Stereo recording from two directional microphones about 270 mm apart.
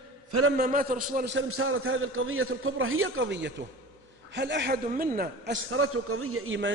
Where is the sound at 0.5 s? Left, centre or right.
Right.